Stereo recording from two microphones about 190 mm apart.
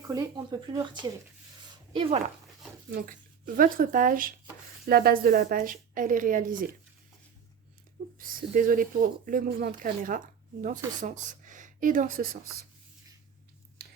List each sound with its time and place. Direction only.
0.1 s speech: 20° right (ahead or behind)
2.9 s speech: 45° right (ahead or behind)
8.2 s speech: 45° right (ahead or behind)